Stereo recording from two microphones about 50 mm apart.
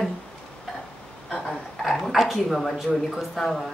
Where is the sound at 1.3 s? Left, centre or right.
Centre.